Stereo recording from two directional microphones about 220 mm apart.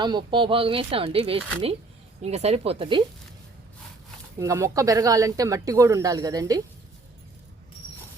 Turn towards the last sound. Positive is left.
turn(degrees=-15)  # may be behind; listen again after turning